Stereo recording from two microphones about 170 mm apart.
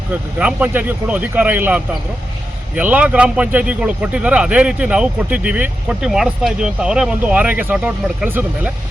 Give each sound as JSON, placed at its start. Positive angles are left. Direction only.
{"t": 0.1, "sound": "speech", "side_deg": -10}